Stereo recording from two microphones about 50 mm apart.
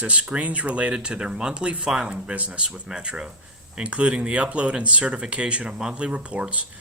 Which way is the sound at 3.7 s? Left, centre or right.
Right.